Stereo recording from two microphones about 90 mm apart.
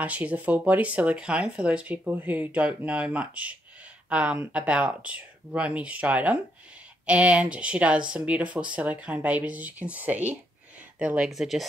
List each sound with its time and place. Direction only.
0.0 s speech: 15° right (ahead or behind)